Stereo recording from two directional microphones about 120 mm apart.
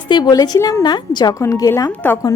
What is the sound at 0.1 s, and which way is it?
A woman's voice, 35° left (ahead or behind).